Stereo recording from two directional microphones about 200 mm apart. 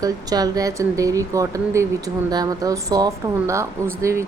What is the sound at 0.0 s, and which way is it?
Speech, 20° right (ahead or behind).